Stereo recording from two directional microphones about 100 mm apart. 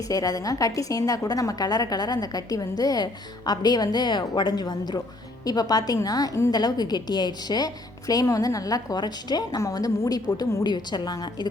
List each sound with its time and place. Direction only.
0.1 s a woman's voice: 35° left (ahead or behind)